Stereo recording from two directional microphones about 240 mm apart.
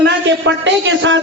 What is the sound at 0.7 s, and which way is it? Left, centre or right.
Speech, right.